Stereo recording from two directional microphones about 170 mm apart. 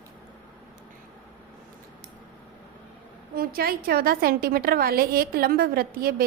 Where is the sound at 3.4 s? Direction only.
60° right (ahead or behind).